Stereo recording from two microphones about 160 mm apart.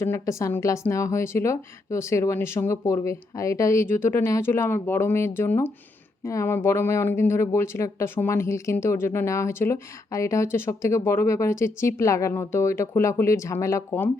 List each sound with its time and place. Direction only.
0.0 s speech: 20° left (ahead or behind)